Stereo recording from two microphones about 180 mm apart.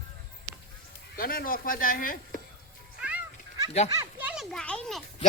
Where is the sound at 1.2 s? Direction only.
55° left (ahead or behind).